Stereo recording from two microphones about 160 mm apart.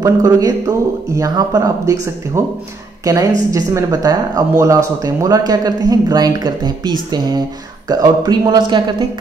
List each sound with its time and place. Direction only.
0.0 s speech: 20° right (ahead or behind)